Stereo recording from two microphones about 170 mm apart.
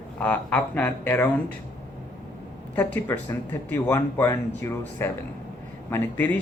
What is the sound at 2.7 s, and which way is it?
Speech, 10° left (ahead or behind).